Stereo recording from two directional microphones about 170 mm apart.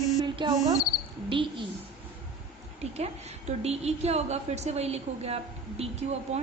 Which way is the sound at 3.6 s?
40° right (ahead or behind).